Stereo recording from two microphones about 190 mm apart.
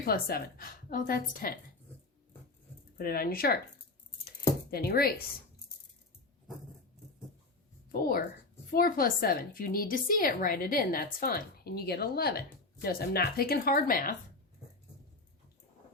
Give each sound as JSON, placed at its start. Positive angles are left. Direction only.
{"t": 0.0, "sound": "a woman's voice", "side_deg": 50}
{"t": 3.0, "sound": "a woman's voice", "side_deg": 50}
{"t": 4.7, "sound": "a woman's voice", "side_deg": 55}
{"t": 7.9, "sound": "a woman's voice", "side_deg": 50}